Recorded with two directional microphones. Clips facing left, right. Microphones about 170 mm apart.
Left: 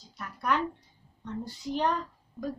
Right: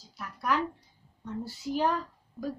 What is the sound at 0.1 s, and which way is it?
A woman's voice, centre (ahead or behind).